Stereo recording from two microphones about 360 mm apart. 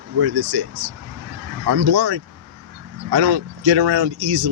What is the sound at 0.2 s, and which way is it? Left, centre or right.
Speech, right.